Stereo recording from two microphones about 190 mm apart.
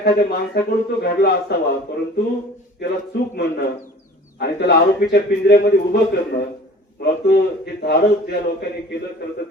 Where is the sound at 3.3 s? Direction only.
60° left (ahead or behind).